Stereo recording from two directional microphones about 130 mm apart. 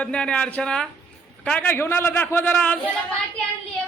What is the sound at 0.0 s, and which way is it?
A man's voice, 10° left (ahead or behind).